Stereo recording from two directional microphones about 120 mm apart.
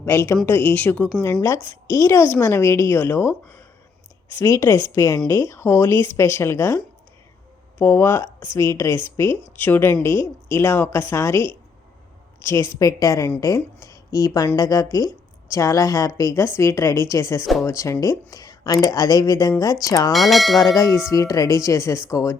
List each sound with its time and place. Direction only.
0.0 s speech: 20° left (ahead or behind)
17.4 s bell: centre (ahead or behind)
17.7 s speech: 25° left (ahead or behind)
20.1 s bell: centre (ahead or behind)
20.6 s speech: 30° left (ahead or behind)